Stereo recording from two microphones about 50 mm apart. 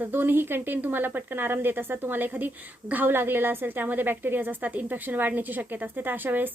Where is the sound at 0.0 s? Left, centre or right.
Right.